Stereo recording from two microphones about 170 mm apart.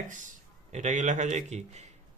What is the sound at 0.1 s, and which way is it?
A man's voice, 45° right (ahead or behind).